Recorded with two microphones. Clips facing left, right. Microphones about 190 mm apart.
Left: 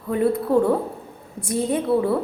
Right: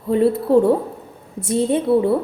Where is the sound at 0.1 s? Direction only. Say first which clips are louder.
Right 4 dB; 25° right (ahead or behind).